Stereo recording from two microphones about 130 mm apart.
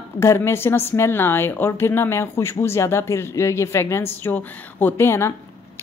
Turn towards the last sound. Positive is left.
turn(degrees=20)  # may be behind; listen again after turning